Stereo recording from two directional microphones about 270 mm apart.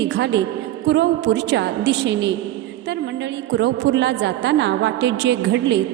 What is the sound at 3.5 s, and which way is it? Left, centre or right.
A woman's voice, right.